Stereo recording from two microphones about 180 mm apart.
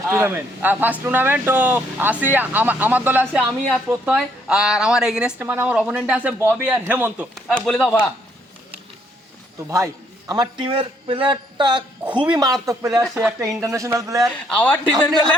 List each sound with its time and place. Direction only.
0.1 s speech: 10° right (ahead or behind); by 8.0 s 5° left (ahead or behind)
9.6 s a man's voice: 15° right (ahead or behind)
14.3 s speech: 5° left (ahead or behind)